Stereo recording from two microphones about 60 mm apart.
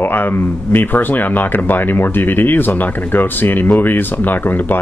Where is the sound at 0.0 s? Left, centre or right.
Left.